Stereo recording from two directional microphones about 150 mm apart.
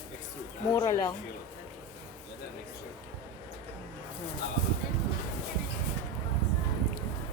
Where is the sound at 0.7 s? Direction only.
25° left (ahead or behind).